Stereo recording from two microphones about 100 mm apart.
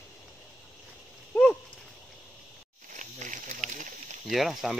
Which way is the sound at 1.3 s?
15° left (ahead or behind).